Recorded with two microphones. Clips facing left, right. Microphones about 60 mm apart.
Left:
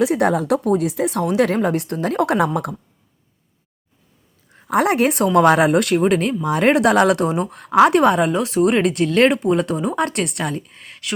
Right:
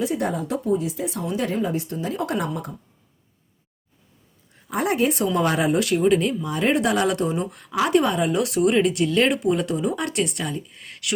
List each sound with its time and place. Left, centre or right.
0.0 s speech: left
4.7 s speech: left
5.2 s speech: left
5.5 s speech: left
5.7 s speech: left
7.3 s speech: left
7.7 s a woman's voice: left
8.3 s speech: left
8.6 s speech: left
10.4 s speech: left